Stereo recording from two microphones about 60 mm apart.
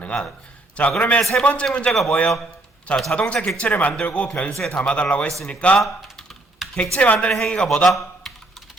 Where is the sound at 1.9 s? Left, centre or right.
Centre; by 4.5 s left.